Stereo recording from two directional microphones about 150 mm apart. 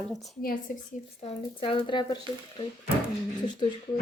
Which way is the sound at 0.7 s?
65° left (ahead or behind).